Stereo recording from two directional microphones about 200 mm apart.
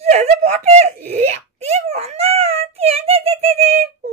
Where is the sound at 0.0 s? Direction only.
35° right (ahead or behind).